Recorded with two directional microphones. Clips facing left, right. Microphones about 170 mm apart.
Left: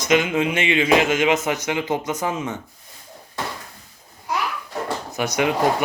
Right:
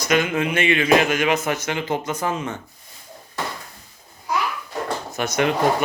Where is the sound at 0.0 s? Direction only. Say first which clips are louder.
Left 1 dB; 20° left (ahead or behind).